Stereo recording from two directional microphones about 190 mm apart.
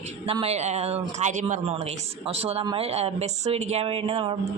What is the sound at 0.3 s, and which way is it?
A woman's voice, 30° right (ahead or behind).